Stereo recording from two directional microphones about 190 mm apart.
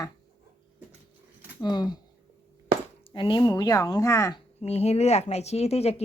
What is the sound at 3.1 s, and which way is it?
Speech, 25° left (ahead or behind).